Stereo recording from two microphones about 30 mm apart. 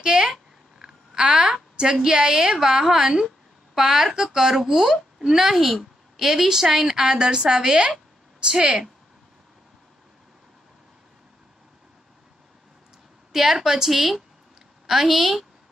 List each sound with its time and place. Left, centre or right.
0.0 s a sound: right
1.2 s a woman's voice: right
1.5 s a woman's voice: right
13.3 s a woman's voice: centre